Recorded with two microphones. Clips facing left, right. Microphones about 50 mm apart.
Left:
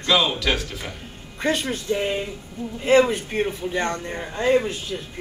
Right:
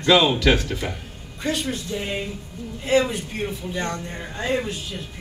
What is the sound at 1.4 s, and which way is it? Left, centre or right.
A man's voice, left.